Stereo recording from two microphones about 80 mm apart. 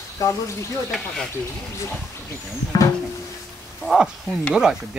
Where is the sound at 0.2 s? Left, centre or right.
Left.